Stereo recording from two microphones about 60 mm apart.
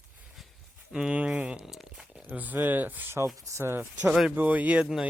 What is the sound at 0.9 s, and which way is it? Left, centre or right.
Speech, centre.